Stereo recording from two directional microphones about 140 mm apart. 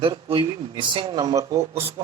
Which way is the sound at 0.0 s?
40° right (ahead or behind).